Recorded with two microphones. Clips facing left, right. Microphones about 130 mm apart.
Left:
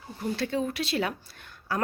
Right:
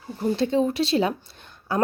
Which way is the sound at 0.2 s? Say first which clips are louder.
Right 7 dB; 25° right (ahead or behind).